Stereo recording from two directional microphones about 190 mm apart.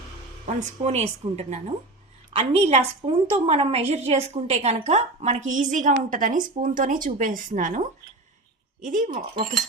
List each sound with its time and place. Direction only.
0.4 s a woman's voice: 35° right (ahead or behind)